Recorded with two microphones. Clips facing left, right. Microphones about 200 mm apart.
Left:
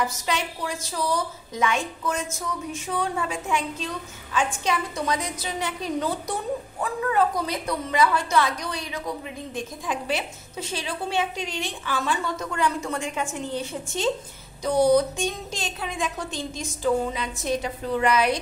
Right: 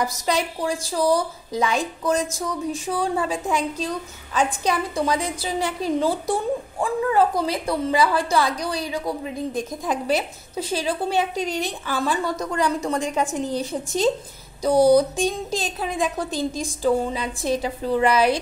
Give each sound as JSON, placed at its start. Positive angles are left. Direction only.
{"t": 0.0, "sound": "a woman's voice", "side_deg": -35}